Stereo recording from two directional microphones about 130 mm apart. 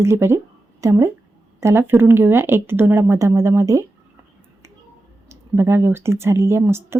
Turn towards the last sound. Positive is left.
turn(degrees=-20)  # may be behind; listen again after turning